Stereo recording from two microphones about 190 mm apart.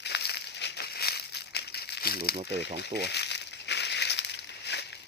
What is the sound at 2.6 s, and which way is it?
Crumpling, 60° left (ahead or behind).